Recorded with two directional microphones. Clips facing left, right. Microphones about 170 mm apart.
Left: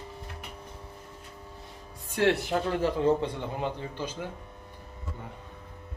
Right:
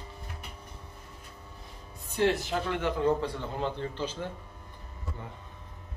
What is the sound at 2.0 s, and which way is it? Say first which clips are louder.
Speech: left 2 dB; 80° left.